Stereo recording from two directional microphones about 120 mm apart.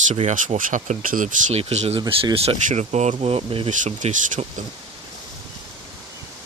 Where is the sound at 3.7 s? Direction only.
80° right.